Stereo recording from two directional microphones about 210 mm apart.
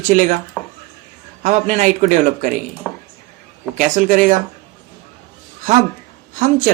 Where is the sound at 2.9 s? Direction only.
10° left (ahead or behind).